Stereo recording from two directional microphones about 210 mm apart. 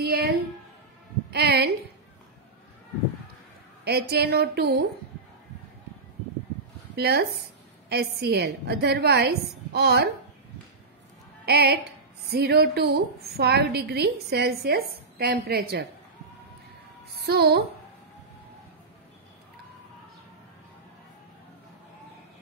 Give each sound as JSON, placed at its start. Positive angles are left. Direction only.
{"t": 0.0, "sound": "a sound", "side_deg": -45}
{"t": 3.8, "sound": "a woman's voice", "side_deg": -50}
{"t": 7.0, "sound": "a woman's voice", "side_deg": -50}
{"t": 11.4, "sound": "a woman's voice", "side_deg": -50}
{"t": 17.3, "sound": "a woman's voice", "side_deg": -50}